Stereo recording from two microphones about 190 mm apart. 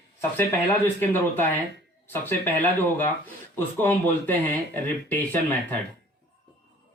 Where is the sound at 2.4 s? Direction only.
10° left (ahead or behind).